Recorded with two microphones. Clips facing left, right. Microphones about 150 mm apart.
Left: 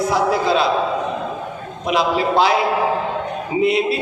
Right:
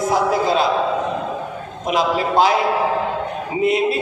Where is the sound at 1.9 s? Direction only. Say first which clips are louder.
Left 1 dB; 45° right (ahead or behind).